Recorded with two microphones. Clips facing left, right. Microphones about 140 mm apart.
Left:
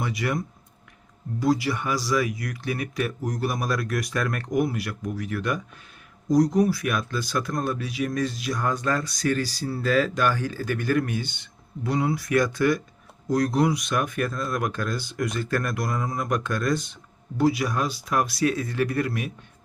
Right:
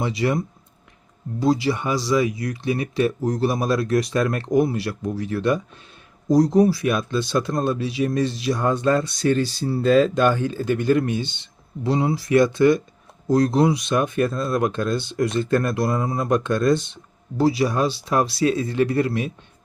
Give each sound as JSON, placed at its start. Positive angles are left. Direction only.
{"t": 0.0, "sound": "speech", "side_deg": -25}